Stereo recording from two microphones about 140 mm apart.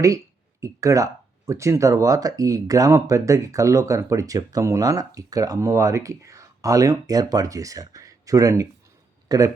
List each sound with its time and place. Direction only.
0.6 s speech: 20° right (ahead or behind)